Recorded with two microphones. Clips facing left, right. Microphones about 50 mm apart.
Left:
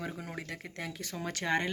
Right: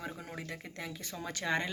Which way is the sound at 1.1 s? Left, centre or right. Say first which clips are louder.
Left 2 dB; left.